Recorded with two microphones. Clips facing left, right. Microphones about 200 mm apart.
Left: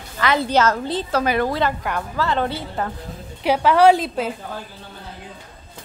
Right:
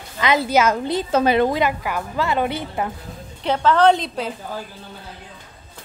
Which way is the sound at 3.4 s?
10° left (ahead or behind).